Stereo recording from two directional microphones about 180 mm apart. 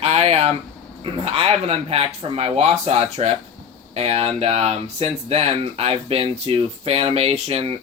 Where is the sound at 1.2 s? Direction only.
30° right (ahead or behind).